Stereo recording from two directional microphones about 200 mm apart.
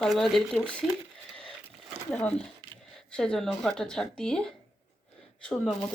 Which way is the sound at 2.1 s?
5° left (ahead or behind).